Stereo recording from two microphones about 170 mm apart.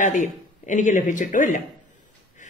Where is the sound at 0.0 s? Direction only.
45° left (ahead or behind).